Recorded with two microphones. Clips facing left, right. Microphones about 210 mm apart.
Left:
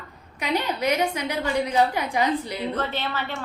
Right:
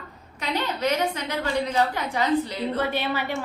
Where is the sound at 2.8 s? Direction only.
10° right (ahead or behind).